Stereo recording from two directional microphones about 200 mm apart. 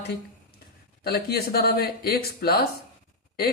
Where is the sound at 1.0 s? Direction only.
50° left (ahead or behind).